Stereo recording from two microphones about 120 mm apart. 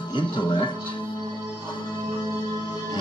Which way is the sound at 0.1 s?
40° left (ahead or behind).